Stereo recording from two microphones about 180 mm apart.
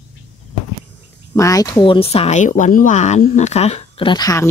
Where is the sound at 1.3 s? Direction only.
20° left (ahead or behind).